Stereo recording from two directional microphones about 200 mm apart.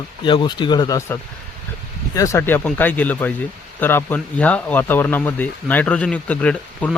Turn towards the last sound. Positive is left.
turn(degrees=5)  # may be behind; listen again after turning